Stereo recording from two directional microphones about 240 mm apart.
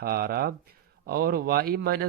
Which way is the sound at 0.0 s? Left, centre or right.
Right.